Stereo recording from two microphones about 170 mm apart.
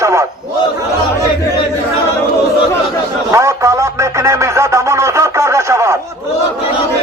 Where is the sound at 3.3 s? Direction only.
15° right (ahead or behind).